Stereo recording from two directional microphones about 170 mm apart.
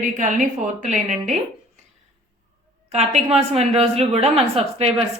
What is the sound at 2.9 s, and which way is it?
A woman's voice, 40° right (ahead or behind).